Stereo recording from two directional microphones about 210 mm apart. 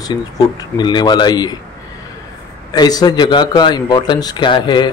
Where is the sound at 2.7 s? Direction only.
20° left (ahead or behind).